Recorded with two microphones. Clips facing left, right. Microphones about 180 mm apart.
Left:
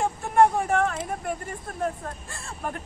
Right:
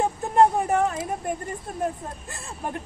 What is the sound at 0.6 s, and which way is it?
Speech, 20° right (ahead or behind).